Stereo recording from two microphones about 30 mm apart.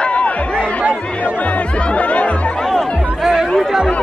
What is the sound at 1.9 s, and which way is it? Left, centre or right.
Music, left.